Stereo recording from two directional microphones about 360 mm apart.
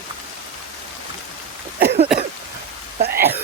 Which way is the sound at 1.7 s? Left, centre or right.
Right.